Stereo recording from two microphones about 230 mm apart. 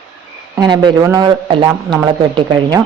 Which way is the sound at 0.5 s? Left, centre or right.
Centre.